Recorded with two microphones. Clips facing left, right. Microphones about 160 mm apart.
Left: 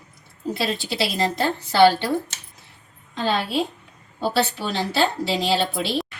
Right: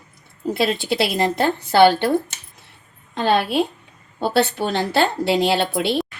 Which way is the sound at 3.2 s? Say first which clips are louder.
Right 4 dB; 60° right (ahead or behind).